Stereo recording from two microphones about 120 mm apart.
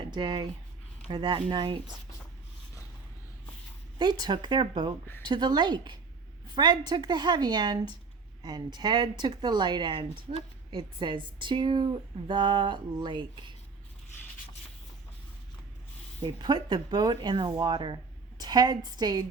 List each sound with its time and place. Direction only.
0.0 s speech: 40° right (ahead or behind)
3.9 s speech: 35° right (ahead or behind)
16.2 s a woman's voice: 35° right (ahead or behind)